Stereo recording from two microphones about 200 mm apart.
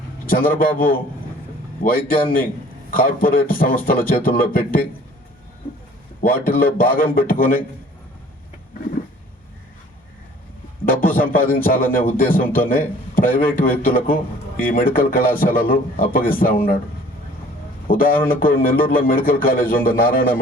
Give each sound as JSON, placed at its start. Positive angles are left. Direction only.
{"t": 0.3, "sound": "speech", "side_deg": 45}
{"t": 6.2, "sound": "speech", "side_deg": 45}
{"t": 10.8, "sound": "speech", "side_deg": 45}
{"t": 17.8, "sound": "speech", "side_deg": 45}